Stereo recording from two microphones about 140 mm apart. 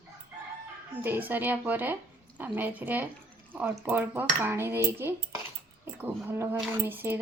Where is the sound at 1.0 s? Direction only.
15° right (ahead or behind).